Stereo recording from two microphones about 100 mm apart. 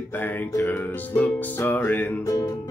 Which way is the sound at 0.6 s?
20° left (ahead or behind).